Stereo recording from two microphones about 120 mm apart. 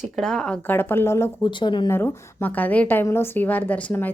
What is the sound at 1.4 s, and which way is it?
Speech, 40° left (ahead or behind).